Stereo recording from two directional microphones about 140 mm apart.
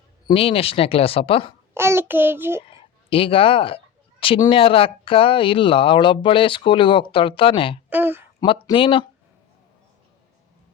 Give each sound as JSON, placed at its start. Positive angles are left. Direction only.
{"t": 0.3, "sound": "speech", "side_deg": 40}
{"t": 1.7, "sound": "child singing", "side_deg": -20}
{"t": 3.1, "sound": "speech", "side_deg": 40}
{"t": 7.9, "sound": "speech", "side_deg": -15}
{"t": 8.4, "sound": "speech", "side_deg": 30}